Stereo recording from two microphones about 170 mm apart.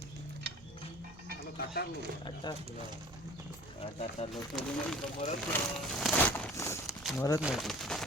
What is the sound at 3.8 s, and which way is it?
Speech, 40° left (ahead or behind).